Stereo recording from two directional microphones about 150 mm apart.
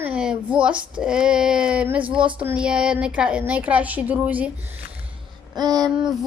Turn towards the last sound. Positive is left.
turn(degrees=-25)  # may be behind; listen again after turning